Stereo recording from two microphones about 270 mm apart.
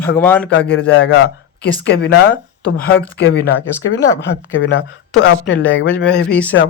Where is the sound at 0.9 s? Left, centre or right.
Left.